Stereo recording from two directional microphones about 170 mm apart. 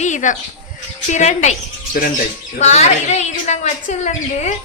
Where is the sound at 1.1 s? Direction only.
45° left (ahead or behind).